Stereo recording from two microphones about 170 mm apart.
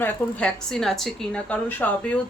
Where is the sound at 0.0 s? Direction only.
5° left (ahead or behind).